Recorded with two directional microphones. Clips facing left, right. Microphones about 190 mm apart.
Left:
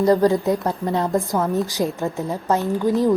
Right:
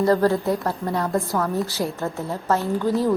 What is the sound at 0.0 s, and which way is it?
A woman's voice, 15° left (ahead or behind).